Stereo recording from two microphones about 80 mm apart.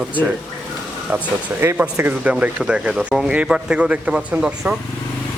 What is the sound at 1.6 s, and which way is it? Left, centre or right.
A man's voice, right.